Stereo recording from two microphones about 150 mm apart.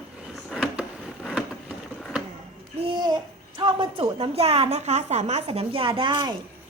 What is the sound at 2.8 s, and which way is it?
Babbling, 30° right (ahead or behind).